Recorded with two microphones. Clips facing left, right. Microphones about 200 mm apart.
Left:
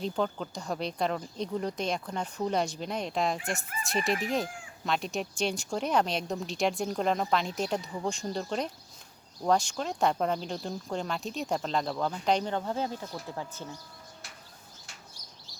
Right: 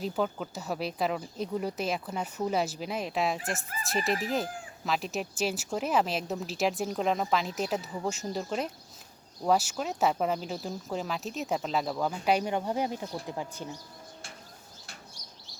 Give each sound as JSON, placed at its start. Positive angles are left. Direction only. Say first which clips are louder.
{"t": 0.0, "sound": "speech", "louder": "even", "side_deg": -5}